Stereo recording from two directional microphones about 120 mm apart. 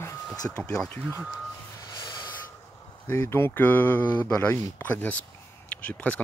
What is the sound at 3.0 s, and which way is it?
Speech, 20° left (ahead or behind).